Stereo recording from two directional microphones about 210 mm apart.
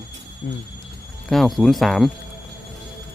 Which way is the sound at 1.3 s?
Centre (ahead or behind).